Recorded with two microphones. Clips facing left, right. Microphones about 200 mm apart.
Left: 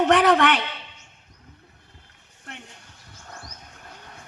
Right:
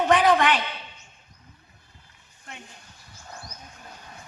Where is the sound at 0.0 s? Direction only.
75° left (ahead or behind).